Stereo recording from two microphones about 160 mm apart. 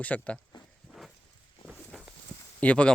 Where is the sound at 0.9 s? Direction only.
Centre (ahead or behind).